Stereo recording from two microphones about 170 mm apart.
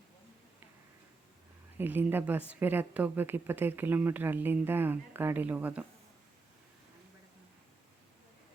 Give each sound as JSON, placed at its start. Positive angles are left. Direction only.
{"t": 1.8, "sound": "a woman's voice", "side_deg": -10}